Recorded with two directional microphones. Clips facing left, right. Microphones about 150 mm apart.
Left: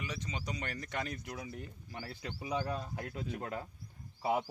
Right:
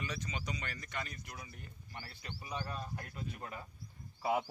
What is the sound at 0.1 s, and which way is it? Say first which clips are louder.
Speech: left 1 dB; 30° left (ahead or behind).